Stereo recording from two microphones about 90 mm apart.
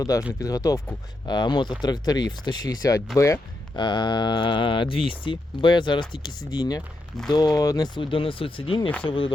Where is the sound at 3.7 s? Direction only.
55° left (ahead or behind).